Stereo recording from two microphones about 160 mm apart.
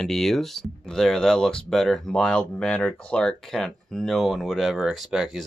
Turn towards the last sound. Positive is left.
turn(degrees=0)  # may be behind; listen again after turning